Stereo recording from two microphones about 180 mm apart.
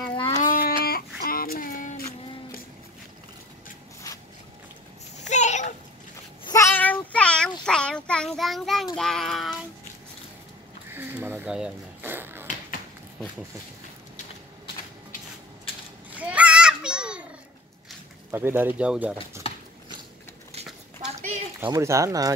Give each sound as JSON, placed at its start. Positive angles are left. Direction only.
{"t": 0.4, "sound": "child singing", "side_deg": 50}
{"t": 5.1, "sound": "a sound", "side_deg": 40}
{"t": 6.4, "sound": "child singing", "side_deg": 15}
{"t": 10.9, "sound": "a sound", "side_deg": -10}
{"t": 16.2, "sound": "children playing", "side_deg": -5}
{"t": 18.3, "sound": "speech", "side_deg": -10}
{"t": 19.4, "sound": "horse", "side_deg": 30}
{"t": 20.5, "sound": "a sound", "side_deg": -35}
{"t": 21.6, "sound": "speech", "side_deg": -20}